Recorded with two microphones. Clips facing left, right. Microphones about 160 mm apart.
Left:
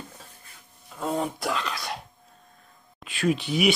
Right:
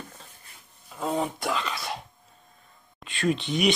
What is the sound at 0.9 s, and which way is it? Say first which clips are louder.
Speech: even; centre (ahead or behind).